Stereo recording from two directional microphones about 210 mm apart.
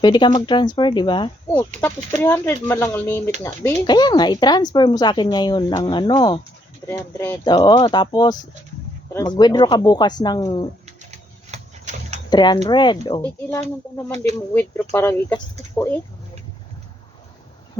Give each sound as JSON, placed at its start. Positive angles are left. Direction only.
{"t": 0.0, "sound": "speech", "side_deg": 20}
{"t": 1.8, "sound": "speech", "side_deg": 10}
{"t": 10.8, "sound": "a sound", "side_deg": -30}
{"t": 12.3, "sound": "speech", "side_deg": 20}